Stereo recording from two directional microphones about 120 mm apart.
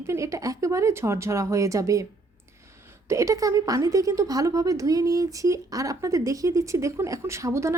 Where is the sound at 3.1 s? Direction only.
25° right (ahead or behind).